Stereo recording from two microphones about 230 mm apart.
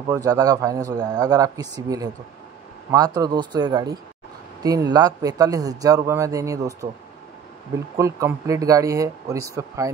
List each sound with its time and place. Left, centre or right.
0.1 s a man's voice: centre
8.0 s a man's voice: centre